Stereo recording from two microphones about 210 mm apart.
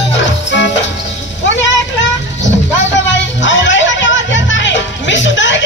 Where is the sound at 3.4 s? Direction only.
60° left (ahead or behind).